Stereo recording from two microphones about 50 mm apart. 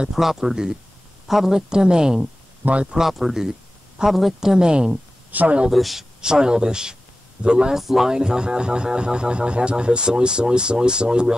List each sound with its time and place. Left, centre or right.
0.1 s speech: centre
2.6 s speech: right
2.9 s speech: centre
5.3 s speech: right
5.7 s a man's voice: centre
6.2 s speech: centre
7.7 s speech: centre